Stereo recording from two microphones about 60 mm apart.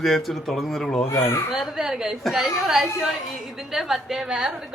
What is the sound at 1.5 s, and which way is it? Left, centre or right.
A woman's voice, centre.